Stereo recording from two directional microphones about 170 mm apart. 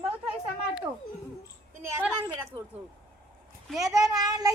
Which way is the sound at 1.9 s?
15° right (ahead or behind).